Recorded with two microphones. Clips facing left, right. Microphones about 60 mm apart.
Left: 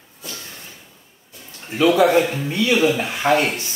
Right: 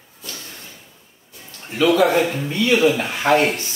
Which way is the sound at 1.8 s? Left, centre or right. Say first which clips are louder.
Even; centre.